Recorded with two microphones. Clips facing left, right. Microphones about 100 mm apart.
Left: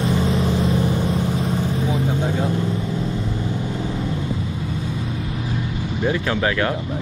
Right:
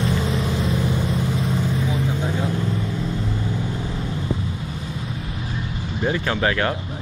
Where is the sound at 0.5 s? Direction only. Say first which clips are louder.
Left 3 dB; 35° left (ahead or behind).